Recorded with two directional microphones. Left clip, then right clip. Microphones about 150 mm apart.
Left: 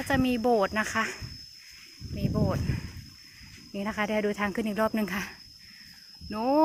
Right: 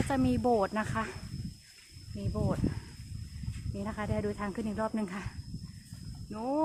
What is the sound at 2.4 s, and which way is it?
Speech, 15° left (ahead or behind).